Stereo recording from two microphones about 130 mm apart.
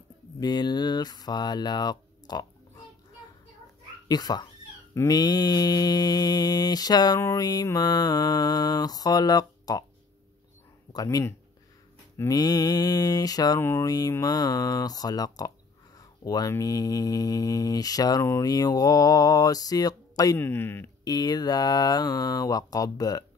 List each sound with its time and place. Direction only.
0.4 s mantra: 30° left (ahead or behind)
4.1 s mantra: 30° left (ahead or behind)
7.2 s speech: 25° left (ahead or behind)
10.9 s speech: 30° left (ahead or behind)
13.6 s speech: 20° left (ahead or behind)
20.3 s speech: 15° left (ahead or behind)
21.0 s speech: 30° left (ahead or behind)